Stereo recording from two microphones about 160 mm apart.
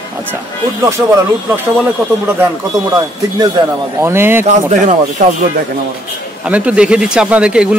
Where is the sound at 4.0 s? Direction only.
15° right (ahead or behind).